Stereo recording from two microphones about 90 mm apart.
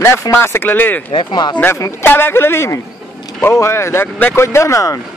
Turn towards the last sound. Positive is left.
turn(degrees=35)  # may be behind; listen again after turning